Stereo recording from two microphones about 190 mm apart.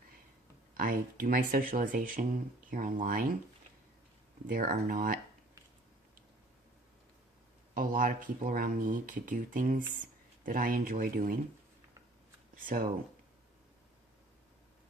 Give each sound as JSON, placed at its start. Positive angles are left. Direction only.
{"t": 0.7, "sound": "speech", "side_deg": -50}
{"t": 4.4, "sound": "speech", "side_deg": -45}
{"t": 7.7, "sound": "speech", "side_deg": -45}
{"t": 12.5, "sound": "speech", "side_deg": -45}